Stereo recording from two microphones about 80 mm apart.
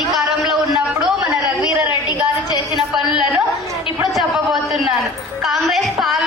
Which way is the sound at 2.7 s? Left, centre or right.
Centre.